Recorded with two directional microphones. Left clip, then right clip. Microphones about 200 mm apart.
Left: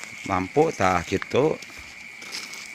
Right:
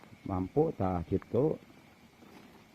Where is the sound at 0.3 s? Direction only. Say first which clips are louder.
Left 9 dB; 25° left (ahead or behind).